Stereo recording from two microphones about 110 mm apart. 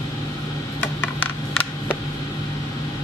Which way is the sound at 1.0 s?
15° left (ahead or behind).